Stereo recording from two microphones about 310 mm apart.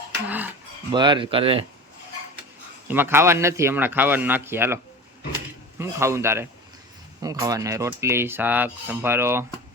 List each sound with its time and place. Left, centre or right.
0.3 s speech: centre
2.8 s speech: centre
5.8 s speech: centre